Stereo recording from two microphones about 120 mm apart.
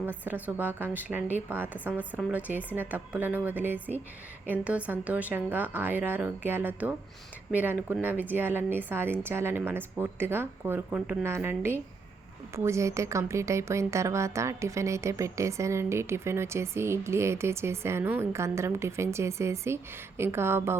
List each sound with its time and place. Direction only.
0.0 s a woman's voice: 15° right (ahead or behind)